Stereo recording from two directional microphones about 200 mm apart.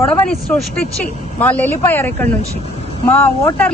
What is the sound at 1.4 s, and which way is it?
Speech, 10° left (ahead or behind).